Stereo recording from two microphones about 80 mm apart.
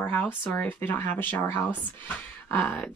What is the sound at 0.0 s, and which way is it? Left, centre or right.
Speech, centre.